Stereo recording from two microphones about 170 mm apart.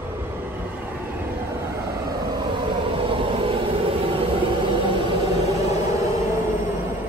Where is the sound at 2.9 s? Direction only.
30° right (ahead or behind).